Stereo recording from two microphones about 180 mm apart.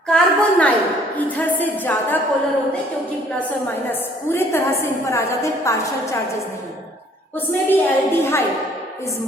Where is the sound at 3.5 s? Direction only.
10° left (ahead or behind).